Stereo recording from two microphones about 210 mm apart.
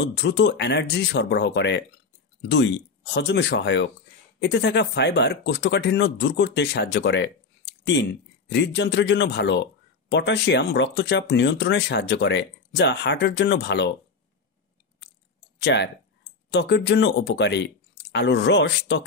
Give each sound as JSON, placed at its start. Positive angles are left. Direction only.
{"t": 0.0, "sound": "speech", "side_deg": 55}
{"t": 15.6, "sound": "speech", "side_deg": 55}